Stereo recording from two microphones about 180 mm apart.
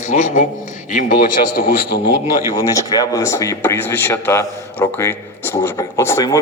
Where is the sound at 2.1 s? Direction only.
20° left (ahead or behind).